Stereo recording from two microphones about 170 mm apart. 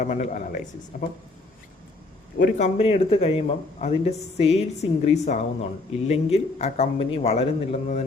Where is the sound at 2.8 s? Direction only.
35° left (ahead or behind).